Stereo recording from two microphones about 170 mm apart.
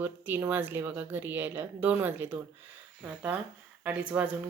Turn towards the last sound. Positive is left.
turn(degrees=-5)  # may be behind; listen again after turning